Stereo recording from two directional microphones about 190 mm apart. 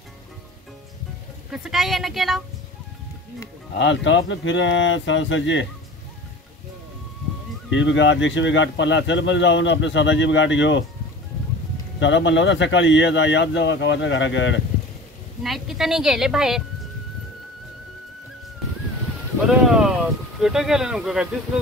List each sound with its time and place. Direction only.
1.5 s a woman's voice: centre (ahead or behind)
3.7 s speech: 70° left (ahead or behind)
7.7 s speech: 75° left (ahead or behind)
12.0 s speech: 70° left (ahead or behind)
15.4 s a woman's voice: centre (ahead or behind)
19.4 s a sound: 5° right (ahead or behind)